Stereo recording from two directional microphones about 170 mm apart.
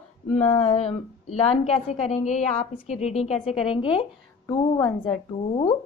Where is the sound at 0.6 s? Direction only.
40° left (ahead or behind).